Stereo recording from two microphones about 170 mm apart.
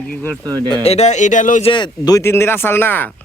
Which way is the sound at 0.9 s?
40° left (ahead or behind).